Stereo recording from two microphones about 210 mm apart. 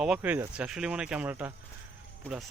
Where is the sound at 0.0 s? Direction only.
5° right (ahead or behind).